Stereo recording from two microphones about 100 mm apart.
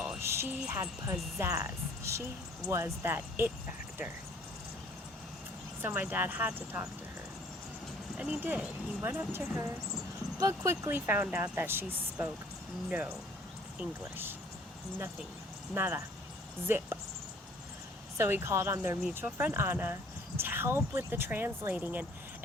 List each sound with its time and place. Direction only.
0.2 s a sound: 25° right (ahead or behind)
1.4 s speech: 25° right (ahead or behind)
5.8 s speech: 20° right (ahead or behind)
8.1 s speech: 10° right (ahead or behind)
10.4 s speech: 30° right (ahead or behind)
13.7 s speech: 20° right (ahead or behind)
15.7 s speech: 20° right (ahead or behind)
18.2 s speech: 25° right (ahead or behind)